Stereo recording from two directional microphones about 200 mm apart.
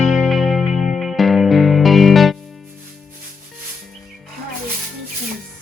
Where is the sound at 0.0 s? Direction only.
Centre (ahead or behind).